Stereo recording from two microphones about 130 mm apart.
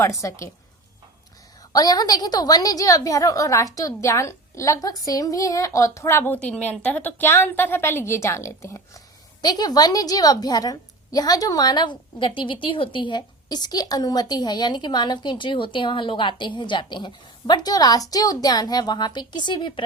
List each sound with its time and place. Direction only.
0.2 s a woman's voice: 25° left (ahead or behind)
1.7 s a woman's voice: 30° left (ahead or behind)